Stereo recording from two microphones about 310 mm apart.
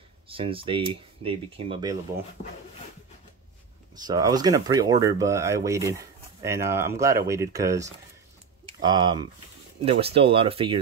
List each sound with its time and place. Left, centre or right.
0.3 s speech: centre
3.9 s speech: centre